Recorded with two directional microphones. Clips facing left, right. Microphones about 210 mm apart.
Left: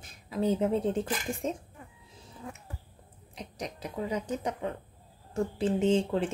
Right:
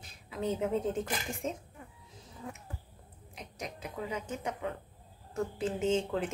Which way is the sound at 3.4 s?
35° left (ahead or behind).